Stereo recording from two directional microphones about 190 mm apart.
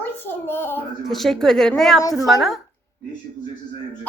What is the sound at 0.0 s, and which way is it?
Speech, 10° left (ahead or behind).